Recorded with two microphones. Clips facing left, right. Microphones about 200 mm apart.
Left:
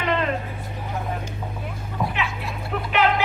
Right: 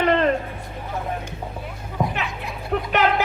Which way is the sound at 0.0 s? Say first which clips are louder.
Right 5 dB; 45° right (ahead or behind).